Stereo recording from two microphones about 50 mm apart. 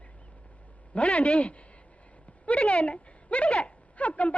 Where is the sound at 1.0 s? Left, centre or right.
Left.